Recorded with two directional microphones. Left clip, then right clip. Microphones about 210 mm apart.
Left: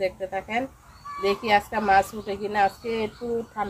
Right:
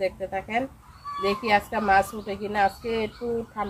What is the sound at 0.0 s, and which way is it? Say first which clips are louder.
A woman's voice: even; 5° left (ahead or behind).